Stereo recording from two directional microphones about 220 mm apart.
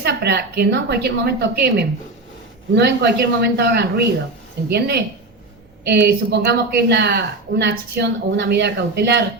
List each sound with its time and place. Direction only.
0.0 s a woman's voice: 50° right (ahead or behind)